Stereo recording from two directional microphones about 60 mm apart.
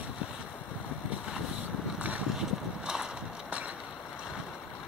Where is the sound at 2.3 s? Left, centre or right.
Centre.